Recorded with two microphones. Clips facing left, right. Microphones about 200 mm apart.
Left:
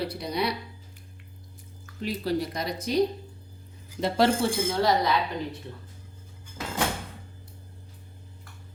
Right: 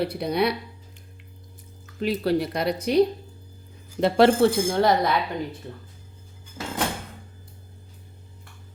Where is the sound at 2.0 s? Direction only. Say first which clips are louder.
Right 5 dB; 65° right (ahead or behind).